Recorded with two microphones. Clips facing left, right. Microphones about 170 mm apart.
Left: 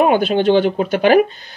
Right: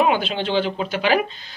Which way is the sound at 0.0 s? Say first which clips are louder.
Left 6 dB; 50° left (ahead or behind).